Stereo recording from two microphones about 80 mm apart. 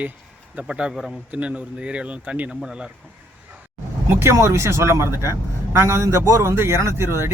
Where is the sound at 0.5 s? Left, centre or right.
Centre.